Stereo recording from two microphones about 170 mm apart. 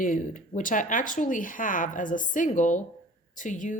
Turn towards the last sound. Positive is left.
turn(degrees=45)  # may be behind; listen again after turning